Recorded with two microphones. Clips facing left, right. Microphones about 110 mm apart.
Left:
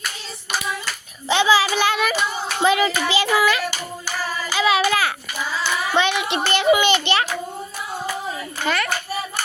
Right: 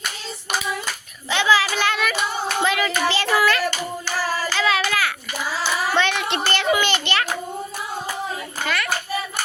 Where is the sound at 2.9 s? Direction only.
5° left (ahead or behind); by 5.1 s 25° left (ahead or behind).